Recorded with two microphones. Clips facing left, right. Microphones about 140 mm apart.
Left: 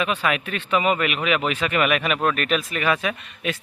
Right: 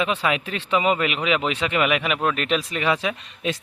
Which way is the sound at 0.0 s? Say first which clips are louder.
Even; 25° right (ahead or behind).